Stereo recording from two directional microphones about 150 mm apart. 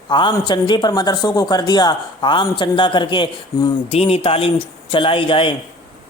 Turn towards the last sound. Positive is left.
turn(degrees=35)  # may be behind; listen again after turning